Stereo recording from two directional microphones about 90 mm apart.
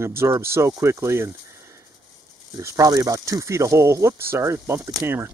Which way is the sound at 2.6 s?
40° right (ahead or behind).